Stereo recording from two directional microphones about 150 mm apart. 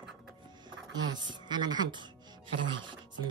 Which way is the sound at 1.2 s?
30° right (ahead or behind).